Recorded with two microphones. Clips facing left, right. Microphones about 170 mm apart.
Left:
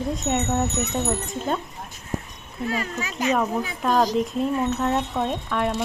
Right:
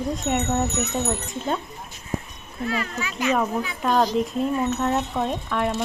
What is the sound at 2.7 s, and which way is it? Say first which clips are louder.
Speech: even; 40° left (ahead or behind).